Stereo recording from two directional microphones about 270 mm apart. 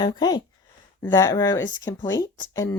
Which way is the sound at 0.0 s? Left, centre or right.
Centre.